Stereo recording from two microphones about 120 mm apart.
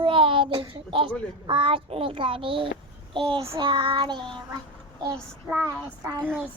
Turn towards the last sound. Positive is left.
turn(degrees=-25)  # may be behind; listen again after turning